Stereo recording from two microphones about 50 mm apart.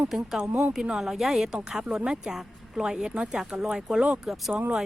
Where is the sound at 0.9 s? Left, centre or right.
Centre.